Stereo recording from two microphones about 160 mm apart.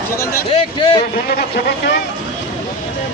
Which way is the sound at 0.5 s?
35° left (ahead or behind).